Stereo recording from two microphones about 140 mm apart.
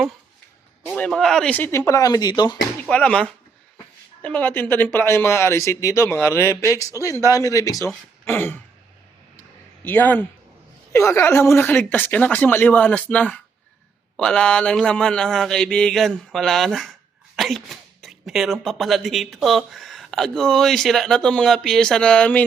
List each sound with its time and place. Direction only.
0.9 s speech: 5° left (ahead or behind); by 2.6 s 30° left (ahead or behind)
2.9 s speech: 5° left (ahead or behind); by 7.8 s 25° left (ahead or behind)
8.2 s throat clearing: 15° left (ahead or behind)
9.8 s speech: 15° left (ahead or behind)